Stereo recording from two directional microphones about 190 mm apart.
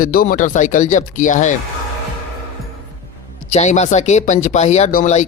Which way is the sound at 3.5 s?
35° left (ahead or behind).